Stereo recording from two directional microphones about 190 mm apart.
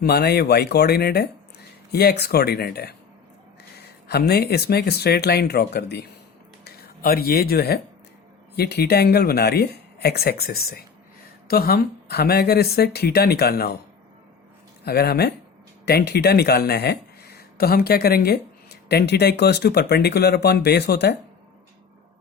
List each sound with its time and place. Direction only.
0.0 s speech: 55° left (ahead or behind)
4.1 s speech: 55° left (ahead or behind)
14.8 s speech: 55° left (ahead or behind)